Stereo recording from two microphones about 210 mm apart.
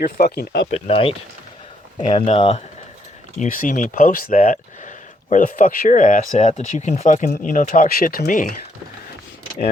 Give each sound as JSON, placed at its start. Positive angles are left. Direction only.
{"t": 0.0, "sound": "speech", "side_deg": 45}
{"t": 0.7, "sound": "speech", "side_deg": 25}